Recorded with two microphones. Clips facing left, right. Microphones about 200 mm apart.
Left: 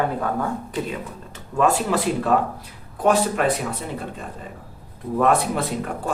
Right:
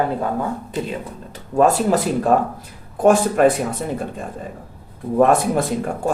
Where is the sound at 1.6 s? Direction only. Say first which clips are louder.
Right 4 dB; 40° right (ahead or behind).